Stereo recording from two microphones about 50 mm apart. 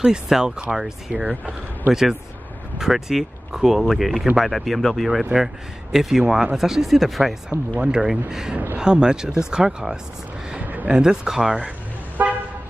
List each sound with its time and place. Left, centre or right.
0.0 s speech: centre
1.1 s speech: right
1.9 s speech: centre
7.8 s speech: centre
10.6 s a sound: right
10.9 s speech: centre
12.2 s car: right